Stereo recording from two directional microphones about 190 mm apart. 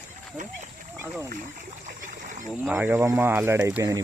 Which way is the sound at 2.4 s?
5° right (ahead or behind).